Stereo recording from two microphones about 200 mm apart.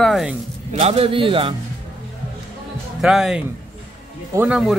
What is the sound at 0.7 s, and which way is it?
Speech, 30° right (ahead or behind).